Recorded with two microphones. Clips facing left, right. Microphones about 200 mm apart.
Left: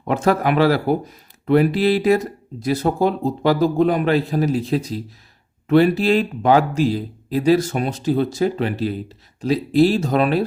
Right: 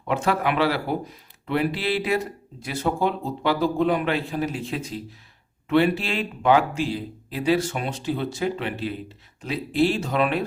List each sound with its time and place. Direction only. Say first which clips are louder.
0.1 s speech: left 5 dB; 40° left (ahead or behind)